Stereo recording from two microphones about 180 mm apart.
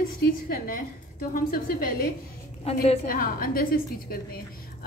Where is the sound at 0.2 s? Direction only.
50° left (ahead or behind).